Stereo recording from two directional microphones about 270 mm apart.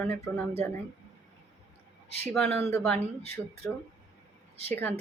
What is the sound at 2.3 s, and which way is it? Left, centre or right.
Speech, centre.